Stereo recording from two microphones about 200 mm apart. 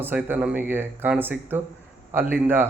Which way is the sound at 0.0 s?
10° right (ahead or behind).